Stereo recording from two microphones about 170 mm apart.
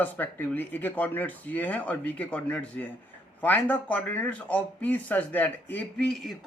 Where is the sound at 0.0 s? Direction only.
10° left (ahead or behind).